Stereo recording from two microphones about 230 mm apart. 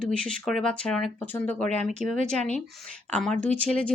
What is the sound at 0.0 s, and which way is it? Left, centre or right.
Speech, centre.